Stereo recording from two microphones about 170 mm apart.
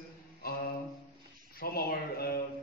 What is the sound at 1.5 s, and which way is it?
Speech, 60° left (ahead or behind).